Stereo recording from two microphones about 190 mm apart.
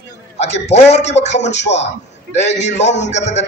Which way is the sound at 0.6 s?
35° left (ahead or behind).